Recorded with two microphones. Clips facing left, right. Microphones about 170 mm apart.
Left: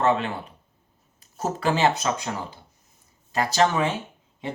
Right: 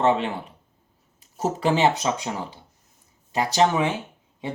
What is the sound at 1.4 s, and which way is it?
Speech, 20° right (ahead or behind).